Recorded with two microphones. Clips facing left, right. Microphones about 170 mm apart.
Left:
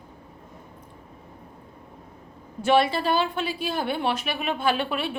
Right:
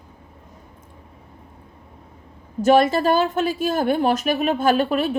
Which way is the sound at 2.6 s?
45° right (ahead or behind).